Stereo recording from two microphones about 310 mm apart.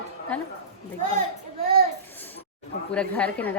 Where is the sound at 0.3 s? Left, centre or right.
Centre.